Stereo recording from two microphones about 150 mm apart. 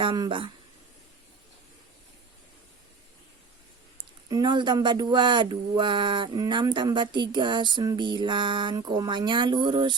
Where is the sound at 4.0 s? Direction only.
30° right (ahead or behind).